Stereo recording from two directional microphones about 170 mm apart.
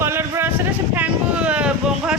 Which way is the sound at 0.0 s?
15° right (ahead or behind).